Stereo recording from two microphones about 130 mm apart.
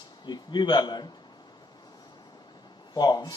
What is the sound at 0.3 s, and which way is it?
Speech, 35° left (ahead or behind).